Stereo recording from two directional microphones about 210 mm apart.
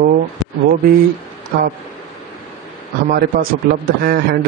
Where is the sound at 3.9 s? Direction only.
45° right (ahead or behind).